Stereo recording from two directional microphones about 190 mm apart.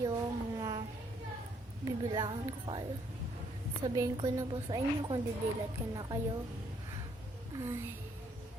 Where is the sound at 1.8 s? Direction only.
20° right (ahead or behind).